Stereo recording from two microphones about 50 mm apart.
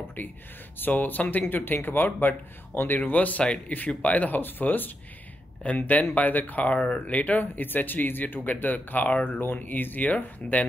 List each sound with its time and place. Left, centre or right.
0.2 s speech: left